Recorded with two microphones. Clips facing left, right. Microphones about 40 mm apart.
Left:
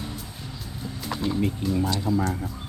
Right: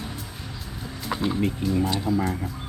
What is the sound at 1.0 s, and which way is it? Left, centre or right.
Music, centre.